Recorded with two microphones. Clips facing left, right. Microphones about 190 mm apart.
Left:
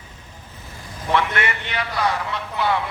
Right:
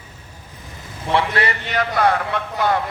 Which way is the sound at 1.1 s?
30° right (ahead or behind).